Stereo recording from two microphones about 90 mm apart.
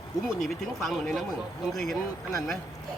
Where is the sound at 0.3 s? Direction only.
Centre (ahead or behind).